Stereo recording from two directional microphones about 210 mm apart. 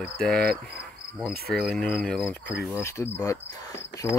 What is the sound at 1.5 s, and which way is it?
Speech, 5° left (ahead or behind).